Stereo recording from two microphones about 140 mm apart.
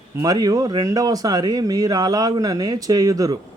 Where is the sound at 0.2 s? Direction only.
30° right (ahead or behind).